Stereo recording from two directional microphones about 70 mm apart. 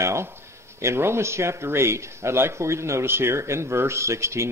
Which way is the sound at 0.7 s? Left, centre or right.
Right.